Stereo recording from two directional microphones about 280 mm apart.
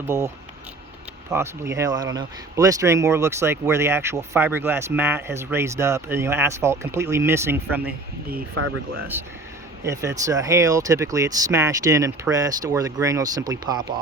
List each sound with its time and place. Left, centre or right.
1.3 s speech: centre
8.5 s speech: right
9.8 s speech: centre